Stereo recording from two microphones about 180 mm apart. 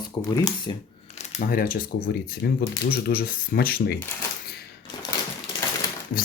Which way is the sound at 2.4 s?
65° left (ahead or behind).